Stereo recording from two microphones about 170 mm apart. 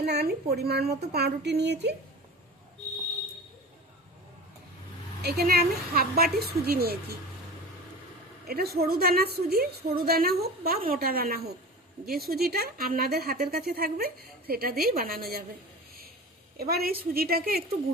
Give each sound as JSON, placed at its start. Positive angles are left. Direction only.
{"t": 0.0, "sound": "a woman's voice", "side_deg": -75}
{"t": 5.2, "sound": "speech", "side_deg": -65}
{"t": 8.4, "sound": "speech", "side_deg": -65}
{"t": 16.6, "sound": "speech", "side_deg": -65}